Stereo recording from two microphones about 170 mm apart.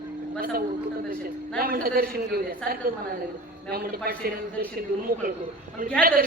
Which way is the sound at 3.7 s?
65° right (ahead or behind).